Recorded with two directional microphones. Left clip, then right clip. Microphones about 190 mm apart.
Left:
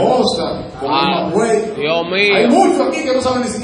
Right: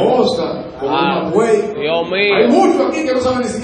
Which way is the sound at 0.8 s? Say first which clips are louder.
Even; 35° left (ahead or behind).